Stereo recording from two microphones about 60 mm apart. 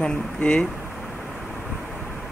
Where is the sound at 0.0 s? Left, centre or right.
Centre.